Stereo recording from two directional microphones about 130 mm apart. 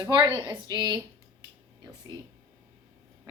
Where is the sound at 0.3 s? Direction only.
35° right (ahead or behind).